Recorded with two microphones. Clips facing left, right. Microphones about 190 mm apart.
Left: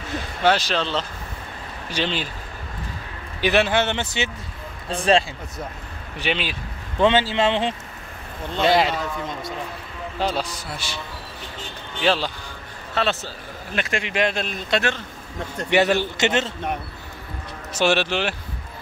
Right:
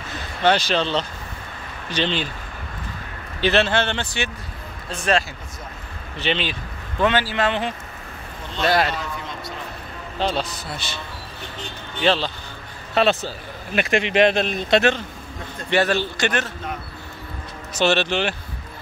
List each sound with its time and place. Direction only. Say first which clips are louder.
0.4 s speech: right 1 dB; centre (ahead or behind)
3.3 s speech: even; 15° left (ahead or behind)
4.8 s speech: left 3 dB; 30° left (ahead or behind)
6.1 s speech: right 1 dB; 10° left (ahead or behind)
7.0 s a man's voice: left 2 dB; 25° left (ahead or behind)
10.1 s speech: right 1 dB; 10° left (ahead or behind)
12.0 s speech: right 1 dB; 5° left (ahead or behind)
12.9 s a man's voice: right 5 dB; 15° right (ahead or behind)
15.7 s a man's voice: left 1 dB; 15° left (ahead or behind)
17.7 s speech: right 1 dB; 10° left (ahead or behind)